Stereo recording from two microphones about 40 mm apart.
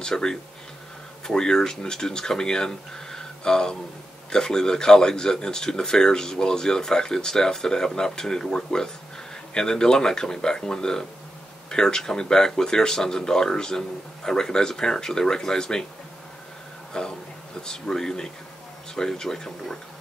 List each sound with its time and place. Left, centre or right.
0.1 s speech: centre
17.0 s speech: left